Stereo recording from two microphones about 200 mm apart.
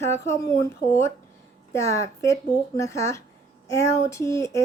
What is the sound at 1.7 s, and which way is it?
Speech, 15° left (ahead or behind).